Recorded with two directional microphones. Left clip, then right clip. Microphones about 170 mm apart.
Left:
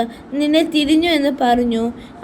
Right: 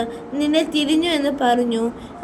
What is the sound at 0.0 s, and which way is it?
A woman's voice, 25° left (ahead or behind).